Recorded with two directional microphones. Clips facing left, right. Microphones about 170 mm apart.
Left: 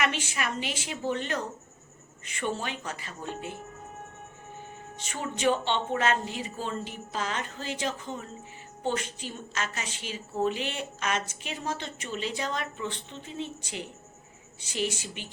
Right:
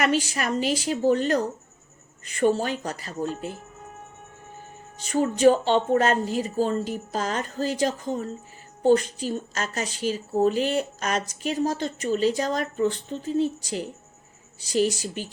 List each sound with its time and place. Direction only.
0.0 s a woman's voice: 40° right (ahead or behind)
5.0 s a woman's voice: 40° right (ahead or behind)